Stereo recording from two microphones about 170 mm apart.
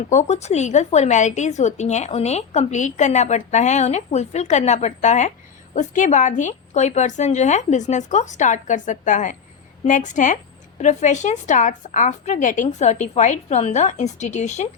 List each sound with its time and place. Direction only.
0.1 s a woman's voice: 45° left (ahead or behind)